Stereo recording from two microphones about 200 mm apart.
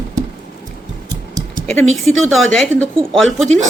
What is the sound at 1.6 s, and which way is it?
Speech, 5° left (ahead or behind).